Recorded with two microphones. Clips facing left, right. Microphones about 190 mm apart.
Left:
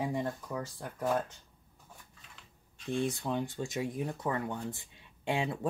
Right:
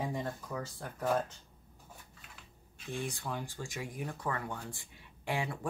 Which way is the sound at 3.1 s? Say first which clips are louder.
Left 6 dB; 20° left (ahead or behind).